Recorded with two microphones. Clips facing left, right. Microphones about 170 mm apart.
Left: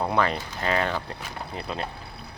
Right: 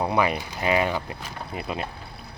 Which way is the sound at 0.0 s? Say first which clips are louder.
Right 1 dB; 10° right (ahead or behind).